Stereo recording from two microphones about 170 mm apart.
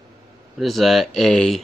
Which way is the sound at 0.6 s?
Centre (ahead or behind).